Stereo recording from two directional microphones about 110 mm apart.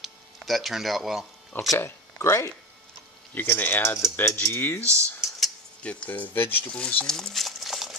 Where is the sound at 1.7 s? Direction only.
25° left (ahead or behind).